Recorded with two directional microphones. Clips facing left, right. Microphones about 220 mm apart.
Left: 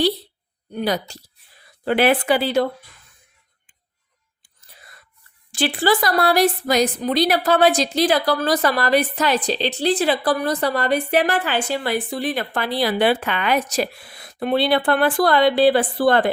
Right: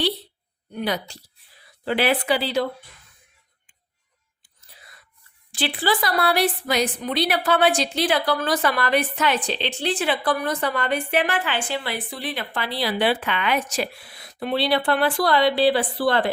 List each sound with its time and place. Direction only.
0.7 s a woman's voice: 35° left (ahead or behind)
1.8 s speech: 50° left (ahead or behind)
5.5 s a woman's voice: 45° left (ahead or behind)